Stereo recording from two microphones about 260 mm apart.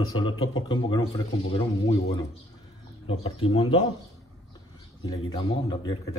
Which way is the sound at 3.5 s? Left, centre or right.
Left.